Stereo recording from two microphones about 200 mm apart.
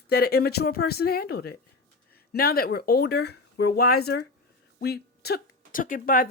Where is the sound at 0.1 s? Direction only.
50° left (ahead or behind).